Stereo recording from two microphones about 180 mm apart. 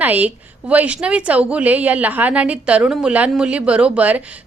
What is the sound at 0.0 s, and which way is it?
A woman's voice, 10° right (ahead or behind).